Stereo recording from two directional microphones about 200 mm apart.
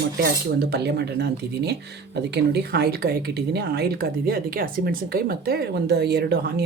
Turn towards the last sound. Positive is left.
turn(degrees=-55)  # may be behind; listen again after turning